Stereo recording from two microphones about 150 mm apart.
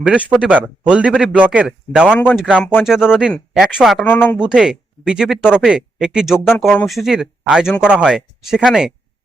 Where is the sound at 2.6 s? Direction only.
15° left (ahead or behind).